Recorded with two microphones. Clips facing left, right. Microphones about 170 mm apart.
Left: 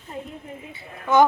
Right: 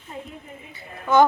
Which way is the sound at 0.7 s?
15° left (ahead or behind).